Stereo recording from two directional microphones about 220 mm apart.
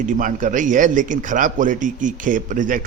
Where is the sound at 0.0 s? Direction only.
35° right (ahead or behind).